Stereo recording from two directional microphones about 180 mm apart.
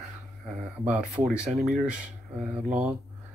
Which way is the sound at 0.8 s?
5° right (ahead or behind).